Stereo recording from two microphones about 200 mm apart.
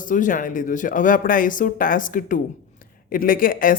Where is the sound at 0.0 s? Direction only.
40° left (ahead or behind).